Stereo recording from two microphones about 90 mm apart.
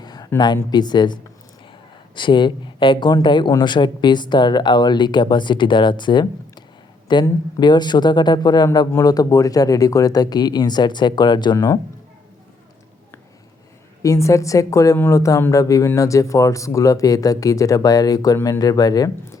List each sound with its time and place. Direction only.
0.0 s a sound: 50° left (ahead or behind)
0.3 s speech: 50° left (ahead or behind)
11.5 s speech: 40° left (ahead or behind)
14.0 s speech: 35° left (ahead or behind)